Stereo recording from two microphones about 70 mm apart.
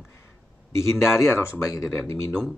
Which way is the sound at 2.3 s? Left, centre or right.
Centre.